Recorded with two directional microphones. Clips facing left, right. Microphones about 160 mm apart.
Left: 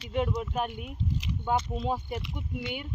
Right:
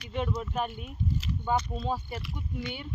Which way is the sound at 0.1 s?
10° left (ahead or behind).